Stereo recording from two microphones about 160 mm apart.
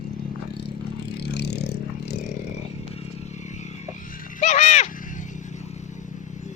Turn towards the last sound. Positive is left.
turn(degrees=45)  # may be behind; listen again after turning